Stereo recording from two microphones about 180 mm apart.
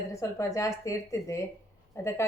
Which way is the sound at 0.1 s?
15° left (ahead or behind).